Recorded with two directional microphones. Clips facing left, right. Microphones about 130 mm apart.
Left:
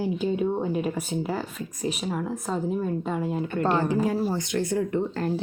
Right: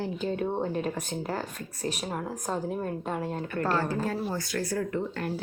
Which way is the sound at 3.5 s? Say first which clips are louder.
Left 4 dB; 20° left (ahead or behind).